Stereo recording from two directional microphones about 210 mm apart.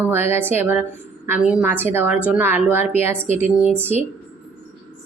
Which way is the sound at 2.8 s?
30° left (ahead or behind).